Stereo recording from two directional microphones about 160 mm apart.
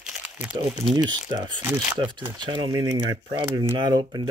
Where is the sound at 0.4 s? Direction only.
25° right (ahead or behind).